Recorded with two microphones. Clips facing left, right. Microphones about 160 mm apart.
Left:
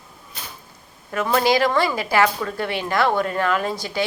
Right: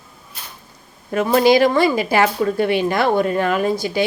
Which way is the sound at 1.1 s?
25° right (ahead or behind).